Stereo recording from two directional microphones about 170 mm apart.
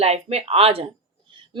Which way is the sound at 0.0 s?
35° right (ahead or behind).